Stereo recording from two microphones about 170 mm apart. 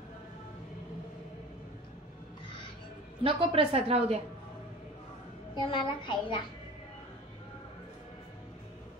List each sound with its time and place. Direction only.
3.3 s a woman's voice: 30° right (ahead or behind)
5.5 s a child's voice: 30° left (ahead or behind)